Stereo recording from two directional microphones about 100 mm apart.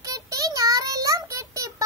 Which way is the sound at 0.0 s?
35° right (ahead or behind).